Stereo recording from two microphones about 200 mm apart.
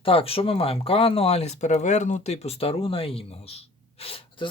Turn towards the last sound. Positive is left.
turn(degrees=25)  # may be behind; listen again after turning